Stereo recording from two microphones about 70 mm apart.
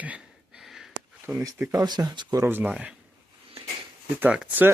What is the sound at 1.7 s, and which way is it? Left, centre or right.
Speech, right.